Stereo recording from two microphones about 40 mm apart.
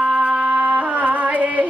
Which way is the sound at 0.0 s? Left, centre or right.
Right.